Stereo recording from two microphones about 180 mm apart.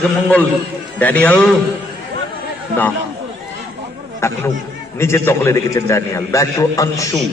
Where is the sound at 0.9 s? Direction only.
10° left (ahead or behind).